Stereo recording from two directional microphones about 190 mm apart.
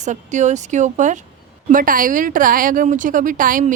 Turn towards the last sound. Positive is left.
turn(degrees=-45)  # may be behind; listen again after turning